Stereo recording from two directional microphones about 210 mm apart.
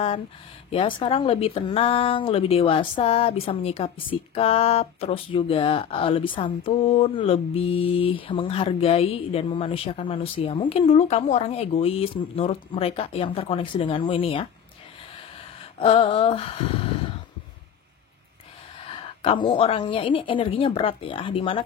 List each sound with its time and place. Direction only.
0.7 s speech: 25° left (ahead or behind)
15.8 s speech: 25° left (ahead or behind)
18.9 s speech: 25° left (ahead or behind)